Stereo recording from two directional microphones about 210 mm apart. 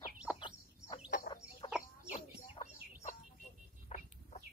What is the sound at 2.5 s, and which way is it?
Chicken, 35° left (ahead or behind).